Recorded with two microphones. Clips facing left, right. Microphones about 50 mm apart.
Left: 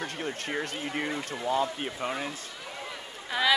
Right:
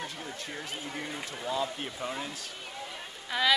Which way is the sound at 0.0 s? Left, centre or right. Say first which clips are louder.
Left 5 dB; left.